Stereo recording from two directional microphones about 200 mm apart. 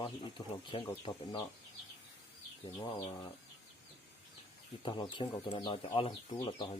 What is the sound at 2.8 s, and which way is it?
Speech, 20° left (ahead or behind).